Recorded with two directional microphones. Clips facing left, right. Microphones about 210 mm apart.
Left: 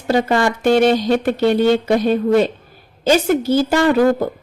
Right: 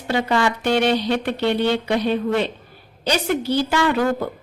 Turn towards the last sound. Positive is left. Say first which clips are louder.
# left 6 dB
turn(degrees=40)  # may be behind; listen again after turning